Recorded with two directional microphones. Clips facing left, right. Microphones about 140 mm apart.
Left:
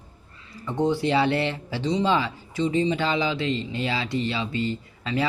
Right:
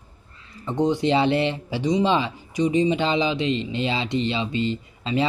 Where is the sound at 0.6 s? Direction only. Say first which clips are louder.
Right 2 dB; 20° right (ahead or behind).